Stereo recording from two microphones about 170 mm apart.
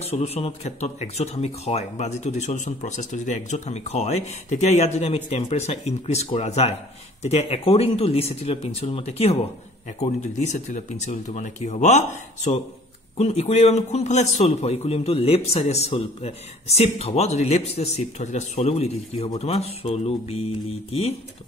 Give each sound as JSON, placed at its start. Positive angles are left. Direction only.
{"t": 0.0, "sound": "a man's voice", "side_deg": 35}
{"t": 13.2, "sound": "a man's voice", "side_deg": 40}